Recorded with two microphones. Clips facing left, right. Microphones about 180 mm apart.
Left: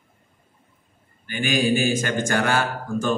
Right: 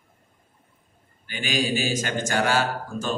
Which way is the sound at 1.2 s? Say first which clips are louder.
Left 5 dB; 50° left (ahead or behind).